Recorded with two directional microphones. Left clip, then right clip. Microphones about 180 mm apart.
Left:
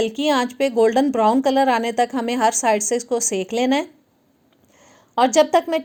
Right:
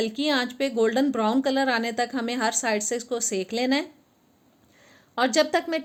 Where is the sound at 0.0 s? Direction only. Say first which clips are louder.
Left 6 dB; 35° left (ahead or behind).